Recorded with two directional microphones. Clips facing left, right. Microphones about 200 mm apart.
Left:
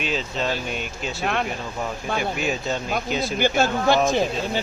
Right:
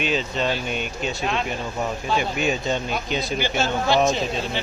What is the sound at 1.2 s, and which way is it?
Speech, 55° left (ahead or behind).